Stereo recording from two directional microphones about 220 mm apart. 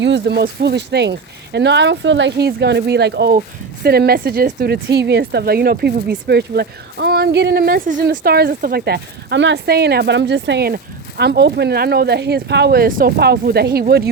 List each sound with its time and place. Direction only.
0.0 s speech: 50° right (ahead or behind)